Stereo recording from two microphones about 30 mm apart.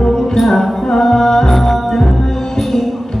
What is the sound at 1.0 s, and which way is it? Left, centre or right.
Music, centre.